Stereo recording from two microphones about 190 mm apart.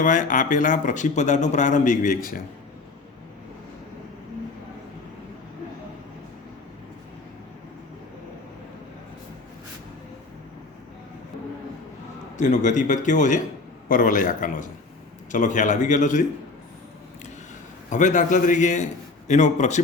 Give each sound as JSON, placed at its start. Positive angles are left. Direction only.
{"t": 0.0, "sound": "a man's voice", "side_deg": 45}
{"t": 12.4, "sound": "a man's voice", "side_deg": 40}
{"t": 17.8, "sound": "a man's voice", "side_deg": 40}